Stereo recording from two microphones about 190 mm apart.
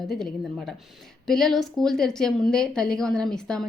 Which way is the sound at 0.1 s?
Centre (ahead or behind).